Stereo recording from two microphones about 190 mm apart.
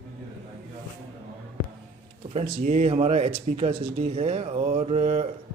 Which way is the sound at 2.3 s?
35° right (ahead or behind).